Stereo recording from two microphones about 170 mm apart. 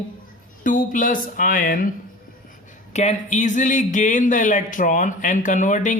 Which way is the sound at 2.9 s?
40° left (ahead or behind).